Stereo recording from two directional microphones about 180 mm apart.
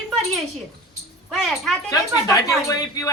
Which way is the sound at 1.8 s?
20° left (ahead or behind).